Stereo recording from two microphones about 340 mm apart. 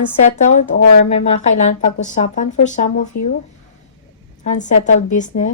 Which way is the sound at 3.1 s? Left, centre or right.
Left.